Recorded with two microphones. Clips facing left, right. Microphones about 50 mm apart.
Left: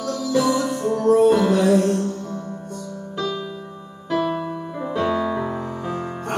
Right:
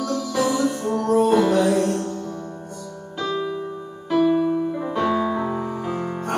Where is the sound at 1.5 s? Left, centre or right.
Centre.